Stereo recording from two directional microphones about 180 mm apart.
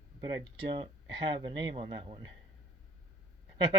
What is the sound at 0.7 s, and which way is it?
A man's voice, 30° right (ahead or behind).